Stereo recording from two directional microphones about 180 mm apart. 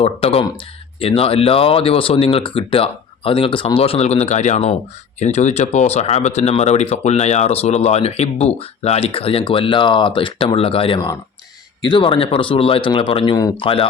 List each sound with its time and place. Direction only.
0.0 s a man's voice: 35° left (ahead or behind)